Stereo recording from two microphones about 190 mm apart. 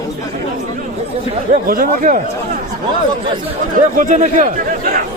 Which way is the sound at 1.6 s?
45° right (ahead or behind).